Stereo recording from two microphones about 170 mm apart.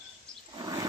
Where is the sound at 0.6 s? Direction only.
25° right (ahead or behind).